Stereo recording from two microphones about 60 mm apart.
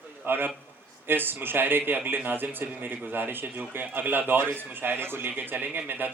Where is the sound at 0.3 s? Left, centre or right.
Right.